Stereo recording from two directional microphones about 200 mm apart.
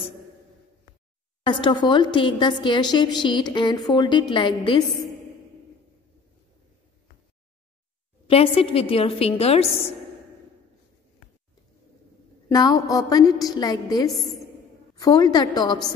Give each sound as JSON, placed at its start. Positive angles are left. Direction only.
{"t": 1.4, "sound": "a woman's voice", "side_deg": 25}
{"t": 8.5, "sound": "a woman's voice", "side_deg": 25}
{"t": 12.4, "sound": "a woman's voice", "side_deg": 15}
{"t": 14.1, "sound": "a woman's voice", "side_deg": 0}
{"t": 15.0, "sound": "a woman's voice", "side_deg": 20}